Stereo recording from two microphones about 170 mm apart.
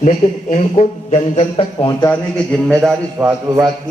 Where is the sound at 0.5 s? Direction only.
40° left (ahead or behind).